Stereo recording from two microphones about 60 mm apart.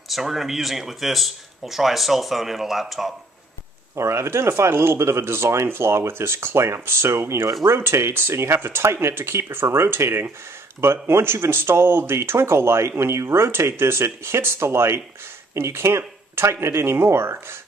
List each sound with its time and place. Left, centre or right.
0.1 s speech: centre
3.9 s speech: right